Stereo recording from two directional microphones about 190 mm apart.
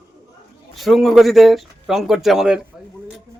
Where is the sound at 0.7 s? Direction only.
Centre (ahead or behind).